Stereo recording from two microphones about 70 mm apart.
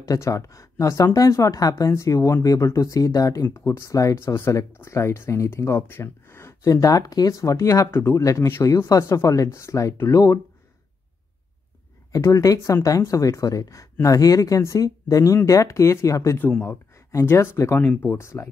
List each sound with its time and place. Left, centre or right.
0.0 s speech: left
3.4 s speech: left
6.6 s speech: left
12.2 s speech: left